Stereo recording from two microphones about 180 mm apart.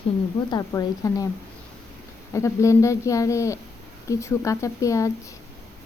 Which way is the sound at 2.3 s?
15° left (ahead or behind).